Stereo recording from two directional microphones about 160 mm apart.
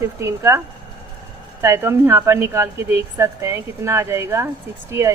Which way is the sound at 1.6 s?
15° right (ahead or behind).